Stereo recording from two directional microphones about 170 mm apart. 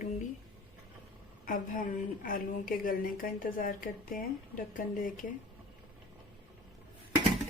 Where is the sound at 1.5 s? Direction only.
55° left (ahead or behind).